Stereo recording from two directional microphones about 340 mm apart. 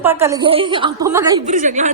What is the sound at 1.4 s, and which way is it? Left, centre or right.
Speech, right.